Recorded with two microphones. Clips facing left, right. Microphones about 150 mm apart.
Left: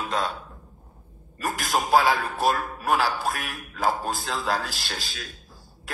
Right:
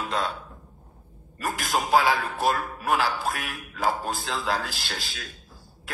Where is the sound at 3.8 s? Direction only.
20° left (ahead or behind).